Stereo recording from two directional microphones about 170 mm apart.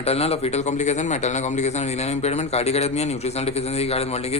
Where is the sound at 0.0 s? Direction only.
35° left (ahead or behind).